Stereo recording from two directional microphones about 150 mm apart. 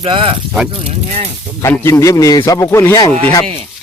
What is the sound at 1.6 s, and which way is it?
Speech, 20° left (ahead or behind).